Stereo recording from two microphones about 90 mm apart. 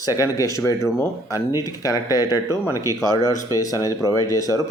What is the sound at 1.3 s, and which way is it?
Speech, 40° left (ahead or behind).